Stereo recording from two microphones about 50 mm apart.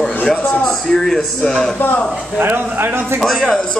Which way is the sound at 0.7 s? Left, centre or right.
Centre.